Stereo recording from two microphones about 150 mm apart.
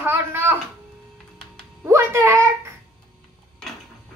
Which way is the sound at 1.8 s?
15° right (ahead or behind).